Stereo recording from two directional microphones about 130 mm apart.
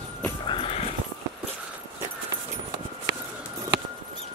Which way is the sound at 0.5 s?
45° left (ahead or behind).